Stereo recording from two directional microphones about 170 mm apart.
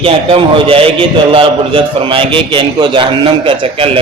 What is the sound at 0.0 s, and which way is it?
A man's voice, 30° right (ahead or behind).